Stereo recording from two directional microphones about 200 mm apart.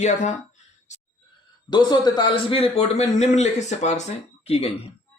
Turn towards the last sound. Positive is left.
turn(degrees=30)  # may be behind; listen again after turning